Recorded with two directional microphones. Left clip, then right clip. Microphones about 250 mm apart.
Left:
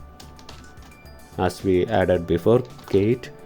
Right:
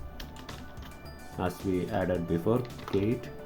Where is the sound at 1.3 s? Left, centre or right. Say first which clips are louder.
Left 11 dB; left.